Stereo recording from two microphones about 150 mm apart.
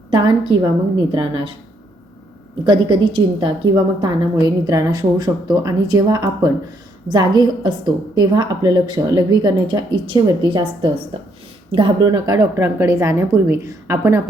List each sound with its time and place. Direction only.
0.1 s a woman's voice: 35° right (ahead or behind)
2.6 s a woman's voice: 30° right (ahead or behind); by 14.2 s 15° right (ahead or behind)